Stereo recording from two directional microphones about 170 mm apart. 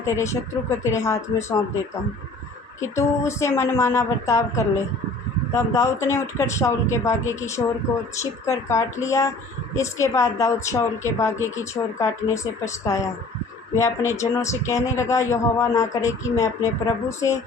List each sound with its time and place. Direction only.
0.0 s a woman's voice: 15° left (ahead or behind)
2.8 s a woman's voice: 15° left (ahead or behind)